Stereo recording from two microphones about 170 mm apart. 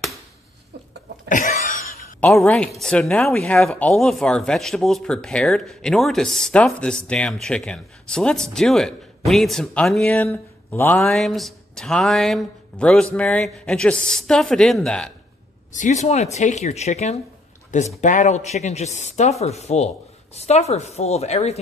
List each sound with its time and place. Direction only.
2.1 s a woman's voice: 10° left (ahead or behind)
15.7 s speech: 45° left (ahead or behind)